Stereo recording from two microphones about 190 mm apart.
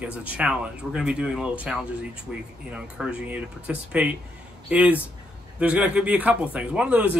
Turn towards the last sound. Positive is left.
turn(degrees=-5)  # may be behind; listen again after turning